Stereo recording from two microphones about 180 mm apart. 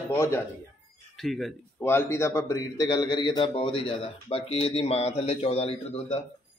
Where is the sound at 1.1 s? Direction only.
Centre (ahead or behind).